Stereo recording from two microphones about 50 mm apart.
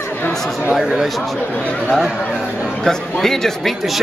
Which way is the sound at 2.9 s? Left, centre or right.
Centre.